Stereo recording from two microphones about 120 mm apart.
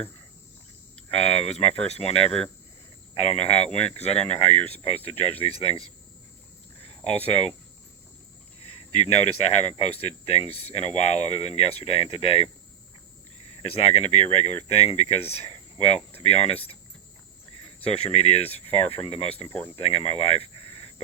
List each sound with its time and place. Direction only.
1.1 s speech: 60° left (ahead or behind)
6.8 s speech: 60° left (ahead or behind)
8.9 s speech: 65° left (ahead or behind)
13.6 s speech: 55° left (ahead or behind)
17.8 s speech: 60° left (ahead or behind)